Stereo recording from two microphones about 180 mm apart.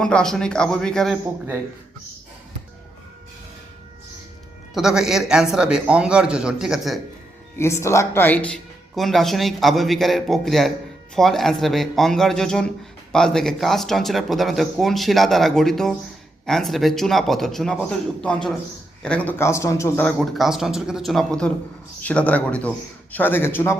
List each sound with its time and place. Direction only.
0.0 s speech: 5° left (ahead or behind)
4.7 s speech: 5° right (ahead or behind)
7.6 s a man's voice: 15° left (ahead or behind)
20.1 s a man's voice: centre (ahead or behind)